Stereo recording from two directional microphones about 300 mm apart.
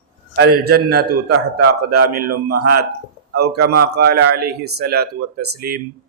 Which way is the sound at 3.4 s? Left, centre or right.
Right.